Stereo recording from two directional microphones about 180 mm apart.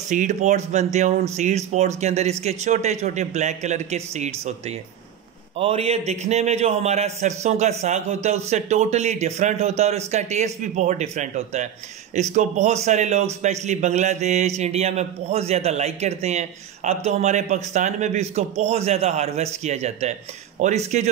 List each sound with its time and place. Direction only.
0.1 s a man's voice: 40° right (ahead or behind)